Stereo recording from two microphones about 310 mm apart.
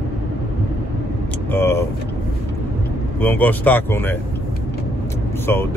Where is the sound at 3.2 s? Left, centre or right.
Centre.